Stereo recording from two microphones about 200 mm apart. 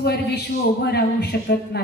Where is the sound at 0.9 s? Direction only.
55° left (ahead or behind).